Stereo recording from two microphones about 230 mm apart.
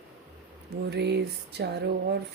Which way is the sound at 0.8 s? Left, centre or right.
Right.